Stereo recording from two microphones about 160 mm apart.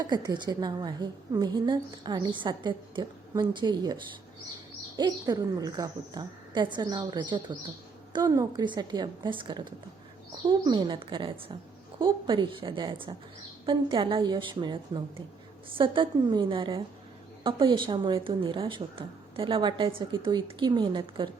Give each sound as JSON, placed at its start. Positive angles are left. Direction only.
{"t": 0.0, "sound": "a woman's voice", "side_deg": -25}
{"t": 4.9, "sound": "a woman's voice", "side_deg": -25}